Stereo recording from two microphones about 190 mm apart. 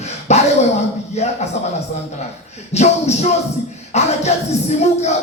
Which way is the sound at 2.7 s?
35° left (ahead or behind).